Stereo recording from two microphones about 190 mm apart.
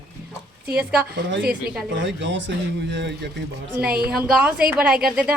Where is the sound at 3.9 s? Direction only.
55° right (ahead or behind).